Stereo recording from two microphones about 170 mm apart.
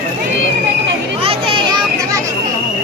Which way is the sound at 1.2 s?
30° right (ahead or behind).